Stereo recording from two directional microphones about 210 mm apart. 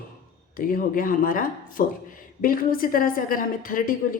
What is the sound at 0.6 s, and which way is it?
A woman's voice, 40° left (ahead or behind).